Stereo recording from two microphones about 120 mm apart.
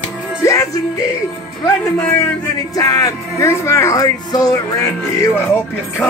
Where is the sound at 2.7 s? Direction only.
30° left (ahead or behind).